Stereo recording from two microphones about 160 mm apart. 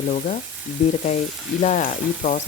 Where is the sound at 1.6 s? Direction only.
45° left (ahead or behind).